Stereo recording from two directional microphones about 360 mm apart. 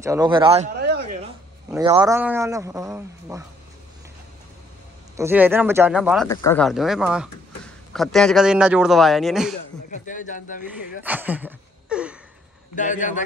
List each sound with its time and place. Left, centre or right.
0.0 s a man's voice: centre
1.9 s a man's voice: centre
5.1 s speech: centre
9.8 s speech: left
11.1 s speech: centre
12.7 s speech: left